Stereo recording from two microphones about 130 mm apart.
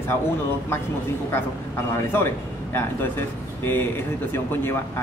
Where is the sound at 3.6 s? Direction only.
15° left (ahead or behind).